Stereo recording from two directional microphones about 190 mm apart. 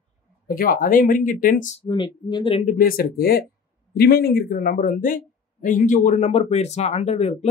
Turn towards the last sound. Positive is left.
turn(degrees=35)  # may be behind; listen again after turning